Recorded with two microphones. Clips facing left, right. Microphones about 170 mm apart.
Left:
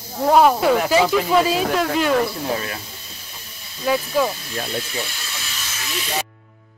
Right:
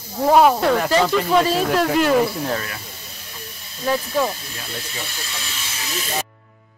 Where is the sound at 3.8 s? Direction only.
5° left (ahead or behind).